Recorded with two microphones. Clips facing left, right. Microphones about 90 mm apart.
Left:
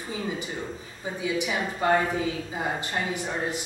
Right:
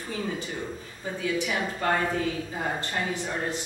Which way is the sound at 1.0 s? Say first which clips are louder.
Even; 15° left (ahead or behind).